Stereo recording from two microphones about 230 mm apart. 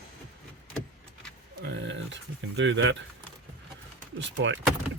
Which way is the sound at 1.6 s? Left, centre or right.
Right.